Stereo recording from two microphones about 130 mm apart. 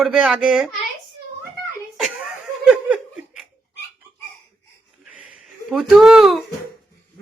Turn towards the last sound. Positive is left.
turn(degrees=0)  # may be behind; listen again after turning